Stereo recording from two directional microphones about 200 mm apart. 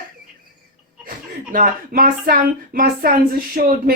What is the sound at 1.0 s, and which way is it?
Speech, 45° right (ahead or behind).